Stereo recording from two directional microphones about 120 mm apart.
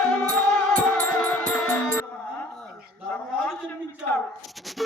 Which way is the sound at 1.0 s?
15° left (ahead or behind).